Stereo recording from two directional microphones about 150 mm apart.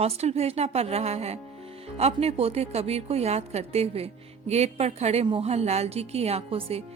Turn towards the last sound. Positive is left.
turn(degrees=-40)  # may be behind; listen again after turning